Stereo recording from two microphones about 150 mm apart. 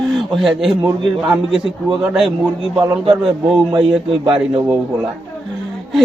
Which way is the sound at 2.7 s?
25° right (ahead or behind).